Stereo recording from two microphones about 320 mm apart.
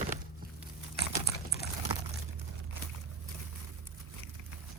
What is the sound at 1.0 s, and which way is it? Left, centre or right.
Typing, left.